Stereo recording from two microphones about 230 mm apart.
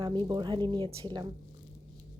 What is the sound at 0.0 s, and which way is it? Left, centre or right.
A woman's voice, right.